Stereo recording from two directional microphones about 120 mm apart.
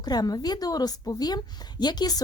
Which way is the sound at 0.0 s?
35° left (ahead or behind).